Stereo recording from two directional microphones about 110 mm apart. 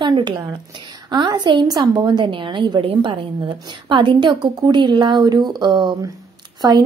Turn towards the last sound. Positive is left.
turn(degrees=-40)  # may be behind; listen again after turning